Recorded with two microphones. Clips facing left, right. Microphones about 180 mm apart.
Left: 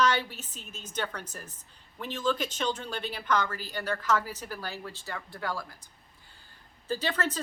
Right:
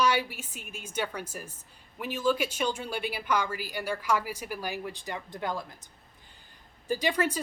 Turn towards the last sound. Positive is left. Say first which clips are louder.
# right 3 dB
turn(degrees=-10)  # may be behind; listen again after turning